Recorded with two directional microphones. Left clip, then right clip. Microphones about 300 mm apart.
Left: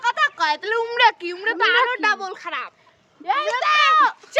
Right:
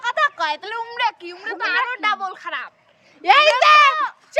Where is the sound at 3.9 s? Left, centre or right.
Centre.